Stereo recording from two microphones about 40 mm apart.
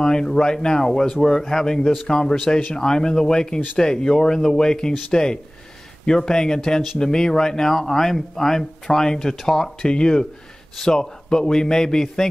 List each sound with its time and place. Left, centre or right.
0.0 s a man's voice: centre